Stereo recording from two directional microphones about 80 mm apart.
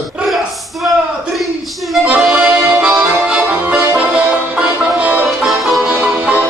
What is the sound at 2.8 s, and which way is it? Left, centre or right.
Music, centre.